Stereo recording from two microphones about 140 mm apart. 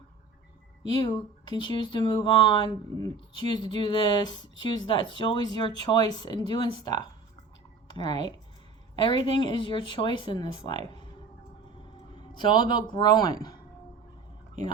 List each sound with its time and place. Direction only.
0.8 s speech: 35° left (ahead or behind)
12.4 s speech: 35° left (ahead or behind)